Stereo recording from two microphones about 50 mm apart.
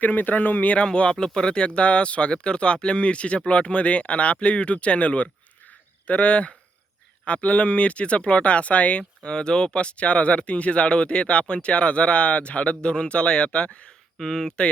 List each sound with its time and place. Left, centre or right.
0.0 s speech: left
0.9 s speech: centre
14.2 s speech: centre